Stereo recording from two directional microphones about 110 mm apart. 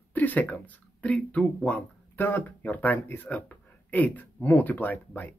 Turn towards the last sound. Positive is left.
turn(degrees=15)  # may be behind; listen again after turning